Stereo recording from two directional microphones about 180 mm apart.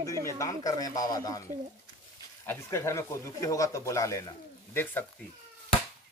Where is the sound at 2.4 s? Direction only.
15° left (ahead or behind).